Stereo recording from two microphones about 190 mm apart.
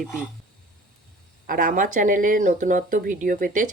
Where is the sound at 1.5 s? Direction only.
45° right (ahead or behind).